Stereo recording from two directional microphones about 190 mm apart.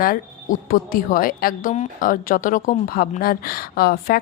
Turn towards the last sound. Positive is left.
turn(degrees=55)  # may be behind; listen again after turning